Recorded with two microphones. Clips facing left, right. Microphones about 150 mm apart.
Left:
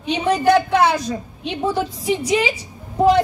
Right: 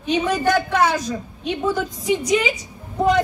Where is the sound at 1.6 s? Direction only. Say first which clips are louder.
Left 3 dB; 30° left (ahead or behind).